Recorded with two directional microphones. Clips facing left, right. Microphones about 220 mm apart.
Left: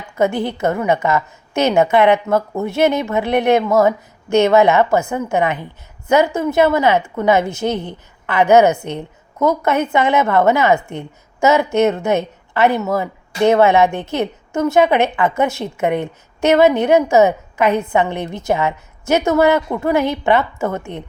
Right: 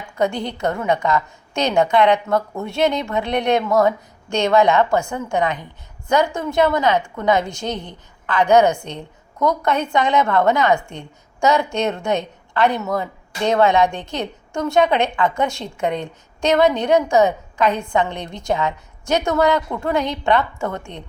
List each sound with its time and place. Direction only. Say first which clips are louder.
0.3 s a woman's voice: left 4 dB; 5° left (ahead or behind)
7.6 s a woman's voice: left 6 dB; 65° left (ahead or behind)
8.3 s a woman's voice: left 3 dB; 5° left (ahead or behind)